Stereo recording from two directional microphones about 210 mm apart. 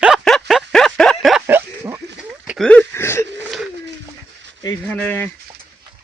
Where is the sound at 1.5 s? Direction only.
10° right (ahead or behind).